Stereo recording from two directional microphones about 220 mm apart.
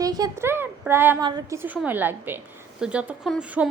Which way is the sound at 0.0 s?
15° right (ahead or behind).